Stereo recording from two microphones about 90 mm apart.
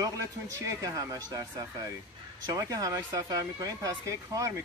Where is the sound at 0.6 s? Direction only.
40° right (ahead or behind).